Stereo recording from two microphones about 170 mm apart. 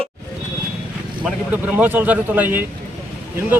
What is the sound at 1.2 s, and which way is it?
Speech, 10° right (ahead or behind).